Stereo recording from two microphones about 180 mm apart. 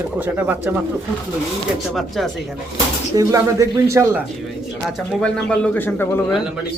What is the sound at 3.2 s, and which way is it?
Speech, 20° right (ahead or behind).